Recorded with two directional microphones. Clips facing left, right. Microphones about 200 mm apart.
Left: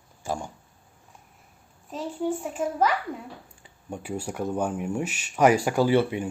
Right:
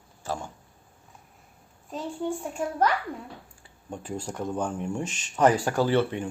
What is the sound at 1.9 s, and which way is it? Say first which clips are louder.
A child's voice: left 2 dB; 5° left (ahead or behind).